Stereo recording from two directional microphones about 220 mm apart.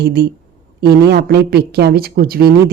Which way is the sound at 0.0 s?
45° right (ahead or behind).